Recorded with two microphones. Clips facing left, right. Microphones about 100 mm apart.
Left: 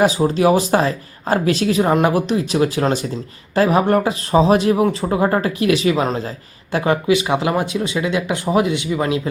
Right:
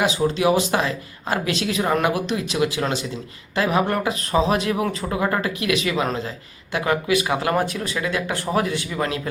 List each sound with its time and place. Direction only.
0.0 s speech: 40° left (ahead or behind); by 9.3 s 20° left (ahead or behind)